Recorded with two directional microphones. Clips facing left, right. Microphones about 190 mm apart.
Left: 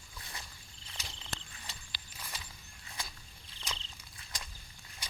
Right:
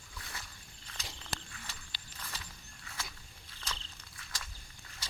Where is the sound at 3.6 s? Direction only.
15° left (ahead or behind).